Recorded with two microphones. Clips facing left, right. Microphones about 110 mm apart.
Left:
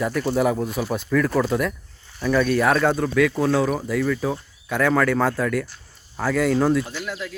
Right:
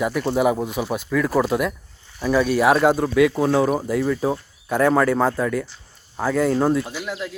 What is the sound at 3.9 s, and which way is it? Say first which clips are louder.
Speech: right 2 dB; 30° right (ahead or behind).